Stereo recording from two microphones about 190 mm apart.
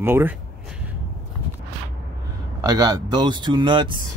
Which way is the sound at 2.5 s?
20° right (ahead or behind).